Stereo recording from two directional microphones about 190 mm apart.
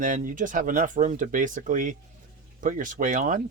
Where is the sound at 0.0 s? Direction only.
45° right (ahead or behind).